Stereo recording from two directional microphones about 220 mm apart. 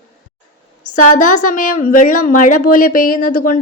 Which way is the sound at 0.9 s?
35° left (ahead or behind).